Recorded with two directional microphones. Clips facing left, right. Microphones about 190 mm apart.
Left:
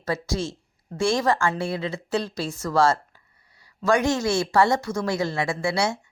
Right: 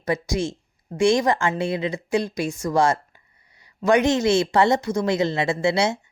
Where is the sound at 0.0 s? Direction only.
15° right (ahead or behind).